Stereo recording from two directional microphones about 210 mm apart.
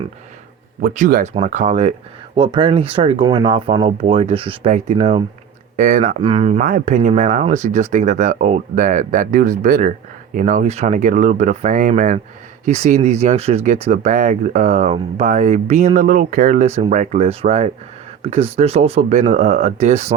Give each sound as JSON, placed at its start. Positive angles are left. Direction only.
{"t": 0.8, "sound": "speech", "side_deg": -40}
{"t": 6.2, "sound": "speech", "side_deg": -25}